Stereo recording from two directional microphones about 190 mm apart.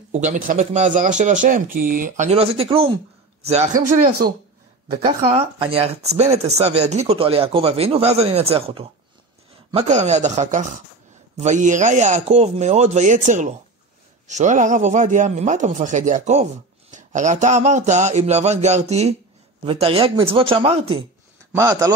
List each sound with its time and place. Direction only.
0.1 s speech: 40° right (ahead or behind)
4.9 s speech: 30° right (ahead or behind)
21.5 s a man's voice: 15° right (ahead or behind)